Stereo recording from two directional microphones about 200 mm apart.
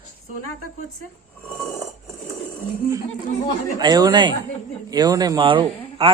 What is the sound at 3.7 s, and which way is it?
Speech, 20° right (ahead or behind).